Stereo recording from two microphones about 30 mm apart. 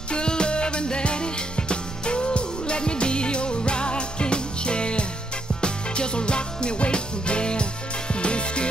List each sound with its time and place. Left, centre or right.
0.1 s music: left